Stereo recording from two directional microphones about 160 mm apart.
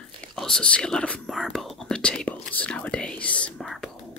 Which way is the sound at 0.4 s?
5° left (ahead or behind).